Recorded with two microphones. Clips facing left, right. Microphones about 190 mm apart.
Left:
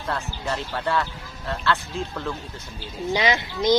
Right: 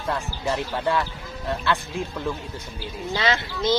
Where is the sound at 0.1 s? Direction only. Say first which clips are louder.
Right 2 dB; 15° right (ahead or behind).